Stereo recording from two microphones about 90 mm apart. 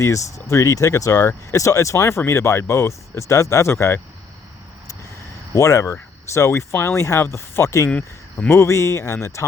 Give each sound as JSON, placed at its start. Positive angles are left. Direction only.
{"t": 0.0, "sound": "speech", "side_deg": 35}
{"t": 5.5, "sound": "speech", "side_deg": 35}
{"t": 7.9, "sound": "speech", "side_deg": 10}
{"t": 8.4, "sound": "speech", "side_deg": 30}